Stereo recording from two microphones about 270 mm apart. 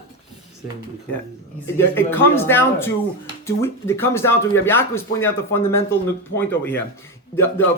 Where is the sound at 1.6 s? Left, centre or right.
Centre.